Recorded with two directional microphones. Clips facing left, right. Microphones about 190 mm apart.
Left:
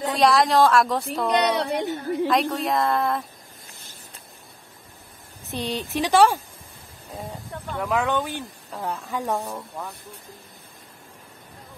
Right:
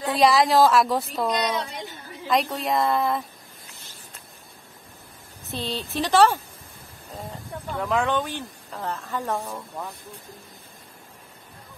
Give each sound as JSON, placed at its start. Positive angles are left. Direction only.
{"t": 0.2, "sound": "a woman's voice", "side_deg": 0}
{"t": 1.3, "sound": "a woman's voice", "side_deg": 65}
{"t": 2.2, "sound": "a woman's voice", "side_deg": 0}
{"t": 5.5, "sound": "a woman's voice", "side_deg": 15}
{"t": 7.7, "sound": "a woman's voice", "side_deg": 5}